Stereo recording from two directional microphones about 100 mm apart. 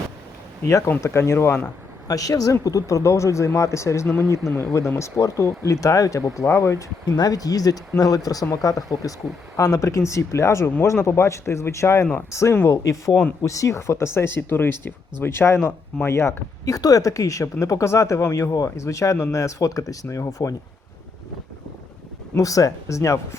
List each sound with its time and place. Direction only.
0.6 s speech: 30° left (ahead or behind)
2.0 s speech: 35° left (ahead or behind)
22.4 s speech: 35° left (ahead or behind)